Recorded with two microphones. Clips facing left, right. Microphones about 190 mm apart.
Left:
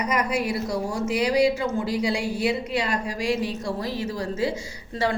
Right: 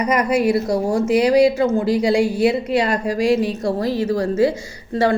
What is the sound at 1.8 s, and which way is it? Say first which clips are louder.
A woman's voice: right 8 dB; 70° right (ahead or behind).